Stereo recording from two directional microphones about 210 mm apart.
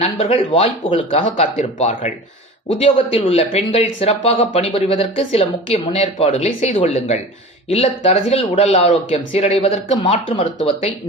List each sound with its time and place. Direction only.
0.0 s speech: 30° left (ahead or behind)